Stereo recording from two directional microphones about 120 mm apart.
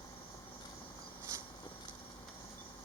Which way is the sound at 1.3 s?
25° right (ahead or behind).